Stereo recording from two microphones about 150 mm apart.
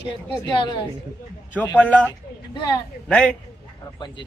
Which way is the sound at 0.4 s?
30° left (ahead or behind).